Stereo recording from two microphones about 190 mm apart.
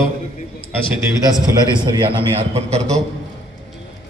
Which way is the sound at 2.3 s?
35° right (ahead or behind).